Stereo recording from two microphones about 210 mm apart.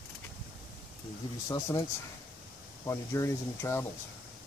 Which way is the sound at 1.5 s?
15° left (ahead or behind).